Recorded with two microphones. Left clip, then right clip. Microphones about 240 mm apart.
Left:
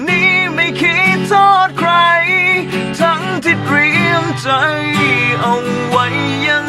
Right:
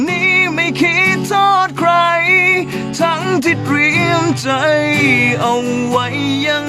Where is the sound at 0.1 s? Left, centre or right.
Right.